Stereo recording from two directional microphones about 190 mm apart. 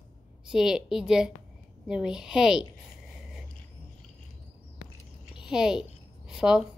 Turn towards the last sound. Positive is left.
turn(degrees=-5)  # may be behind; listen again after turning